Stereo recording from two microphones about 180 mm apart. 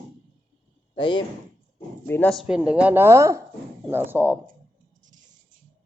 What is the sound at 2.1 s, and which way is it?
Speech, 10° left (ahead or behind).